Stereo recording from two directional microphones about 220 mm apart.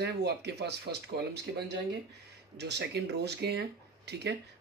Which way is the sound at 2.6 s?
50° right (ahead or behind).